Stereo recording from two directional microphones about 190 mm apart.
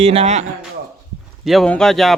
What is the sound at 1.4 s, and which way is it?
Speech, centre (ahead or behind).